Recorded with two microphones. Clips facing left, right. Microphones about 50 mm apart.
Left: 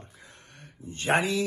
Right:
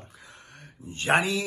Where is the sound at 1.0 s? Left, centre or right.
Right.